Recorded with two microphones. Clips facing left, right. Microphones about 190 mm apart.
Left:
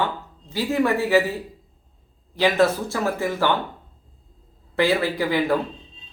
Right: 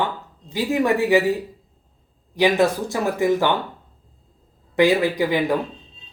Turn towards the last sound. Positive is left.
turn(degrees=-15)  # may be behind; listen again after turning